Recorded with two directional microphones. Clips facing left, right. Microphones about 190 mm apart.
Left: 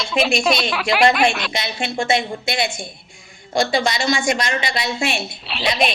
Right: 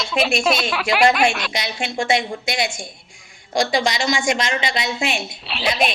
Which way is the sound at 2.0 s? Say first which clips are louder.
Even; 15° right (ahead or behind).